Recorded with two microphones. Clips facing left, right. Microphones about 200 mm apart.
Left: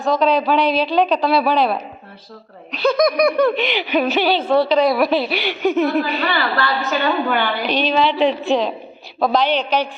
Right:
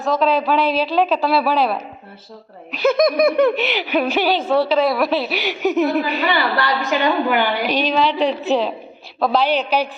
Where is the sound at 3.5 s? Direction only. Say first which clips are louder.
Left 1 dB; 5° right (ahead or behind).